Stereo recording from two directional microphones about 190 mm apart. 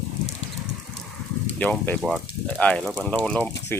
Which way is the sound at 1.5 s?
10° left (ahead or behind).